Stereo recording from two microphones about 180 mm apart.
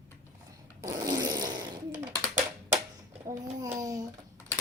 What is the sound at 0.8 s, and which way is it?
Fart, 20° right (ahead or behind).